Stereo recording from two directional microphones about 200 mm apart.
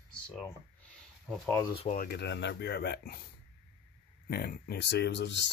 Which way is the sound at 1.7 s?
40° left (ahead or behind).